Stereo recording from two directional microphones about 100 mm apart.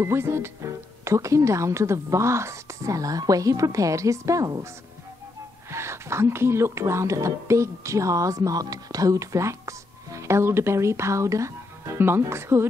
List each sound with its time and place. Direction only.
0.0 s a woman's voice: 25° right (ahead or behind)
5.7 s speech: 25° right (ahead or behind)